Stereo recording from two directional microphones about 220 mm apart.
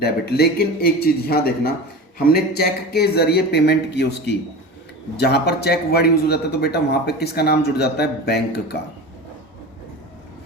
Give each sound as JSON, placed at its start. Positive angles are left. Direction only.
{"t": 0.0, "sound": "a man's voice", "side_deg": 45}